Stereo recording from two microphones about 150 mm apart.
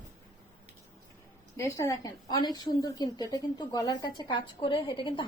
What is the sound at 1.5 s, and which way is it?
A woman's voice, 20° left (ahead or behind).